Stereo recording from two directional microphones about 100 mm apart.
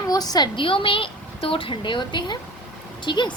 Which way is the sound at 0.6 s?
60° left (ahead or behind).